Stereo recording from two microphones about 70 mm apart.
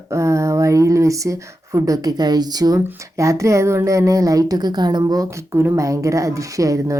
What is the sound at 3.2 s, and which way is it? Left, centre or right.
A woman's voice, right.